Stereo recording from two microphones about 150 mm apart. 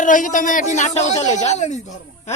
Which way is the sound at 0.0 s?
60° left (ahead or behind).